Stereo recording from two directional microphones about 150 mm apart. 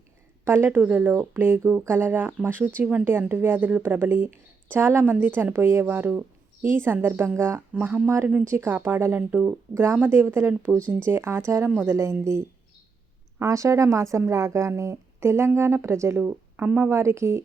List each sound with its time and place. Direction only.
0.4 s speech: 15° right (ahead or behind)